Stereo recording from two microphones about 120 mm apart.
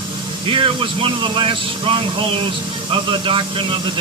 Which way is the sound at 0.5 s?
45° right (ahead or behind).